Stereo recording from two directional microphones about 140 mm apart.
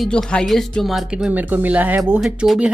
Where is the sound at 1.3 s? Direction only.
10° right (ahead or behind).